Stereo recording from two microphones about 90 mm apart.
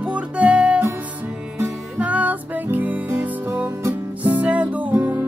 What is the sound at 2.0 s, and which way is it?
Music, 15° right (ahead or behind).